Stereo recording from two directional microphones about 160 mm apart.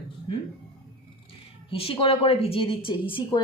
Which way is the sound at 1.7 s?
35° left (ahead or behind).